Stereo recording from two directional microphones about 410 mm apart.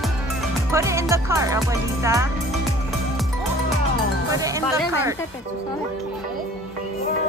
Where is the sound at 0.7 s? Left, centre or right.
Centre.